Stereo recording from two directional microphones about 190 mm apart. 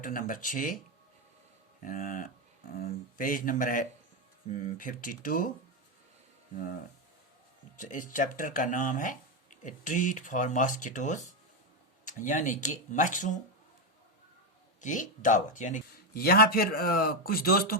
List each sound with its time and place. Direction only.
0.0 s speech: 45° left (ahead or behind)
1.8 s speech: 45° left (ahead or behind)
7.8 s speech: 45° left (ahead or behind)
14.8 s speech: 40° left (ahead or behind)